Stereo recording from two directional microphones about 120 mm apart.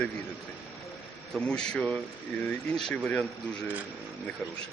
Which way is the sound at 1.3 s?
5° left (ahead or behind).